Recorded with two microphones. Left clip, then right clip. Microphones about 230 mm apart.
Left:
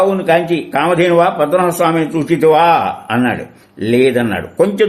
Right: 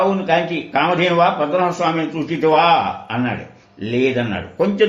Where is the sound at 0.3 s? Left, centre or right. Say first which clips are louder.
Left 5 dB; left.